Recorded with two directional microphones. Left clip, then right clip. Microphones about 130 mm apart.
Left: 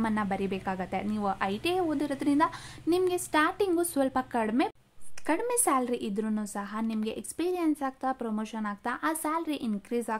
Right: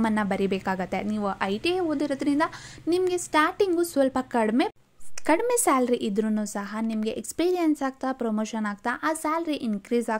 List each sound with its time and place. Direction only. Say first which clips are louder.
0.0 s a woman's voice: right 5 dB; 30° right (ahead or behind)
7.3 s a woman's voice: right 5 dB; 40° right (ahead or behind)
9.0 s a woman's voice: right 3 dB; 25° right (ahead or behind)